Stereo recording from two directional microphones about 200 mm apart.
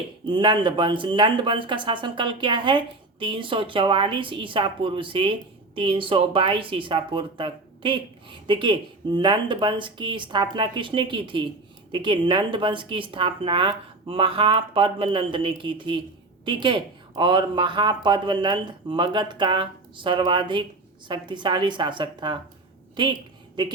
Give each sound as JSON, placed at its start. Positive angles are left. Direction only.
{"t": 0.3, "sound": "speech", "side_deg": -25}